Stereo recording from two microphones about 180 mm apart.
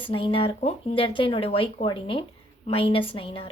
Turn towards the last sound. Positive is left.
turn(degrees=30)  # may be behind; listen again after turning